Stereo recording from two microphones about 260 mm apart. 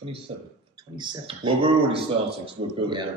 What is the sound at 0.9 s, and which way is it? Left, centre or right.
Speech, centre.